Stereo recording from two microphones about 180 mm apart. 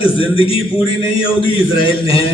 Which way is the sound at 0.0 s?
30° left (ahead or behind).